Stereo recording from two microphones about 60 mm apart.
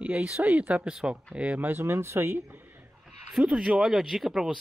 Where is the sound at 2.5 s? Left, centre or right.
Right.